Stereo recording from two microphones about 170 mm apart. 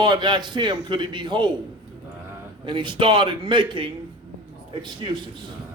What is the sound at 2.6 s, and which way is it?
A man's voice, 30° right (ahead or behind).